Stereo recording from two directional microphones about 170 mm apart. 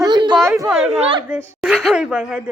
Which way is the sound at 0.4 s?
15° right (ahead or behind).